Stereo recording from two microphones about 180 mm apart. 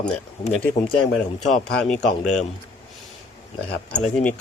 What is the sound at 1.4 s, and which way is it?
Speech, 40° left (ahead or behind).